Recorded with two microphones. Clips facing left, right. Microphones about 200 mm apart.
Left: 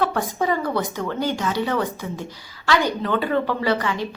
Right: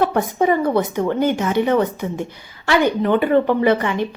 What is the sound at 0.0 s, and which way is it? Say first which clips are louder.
Speech: right 5 dB; 25° right (ahead or behind).